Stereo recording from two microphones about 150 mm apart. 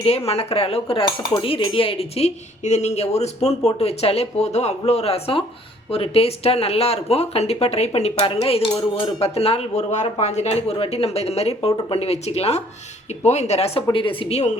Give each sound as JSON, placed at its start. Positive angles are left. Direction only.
{"t": 0.3, "sound": "speech", "side_deg": 40}